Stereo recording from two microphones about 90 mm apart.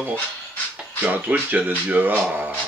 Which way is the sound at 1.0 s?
20° right (ahead or behind).